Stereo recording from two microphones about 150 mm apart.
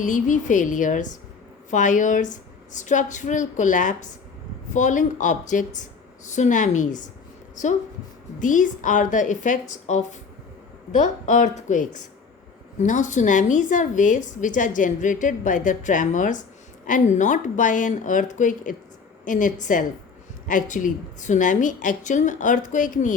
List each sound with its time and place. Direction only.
0.0 s a woman's voice: 60° left (ahead or behind)